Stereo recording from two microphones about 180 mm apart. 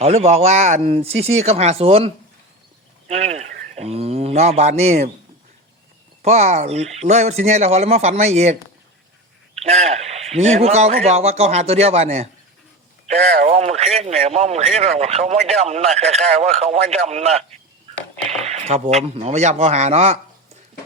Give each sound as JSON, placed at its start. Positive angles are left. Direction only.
{"t": 0.0, "sound": "speech", "side_deg": -35}
{"t": 6.2, "sound": "speech", "side_deg": -35}
{"t": 9.6, "sound": "speech", "side_deg": -40}
{"t": 18.4, "sound": "speech", "side_deg": -40}